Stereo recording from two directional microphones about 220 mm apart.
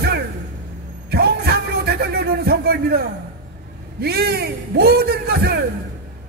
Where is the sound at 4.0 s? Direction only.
45° right (ahead or behind).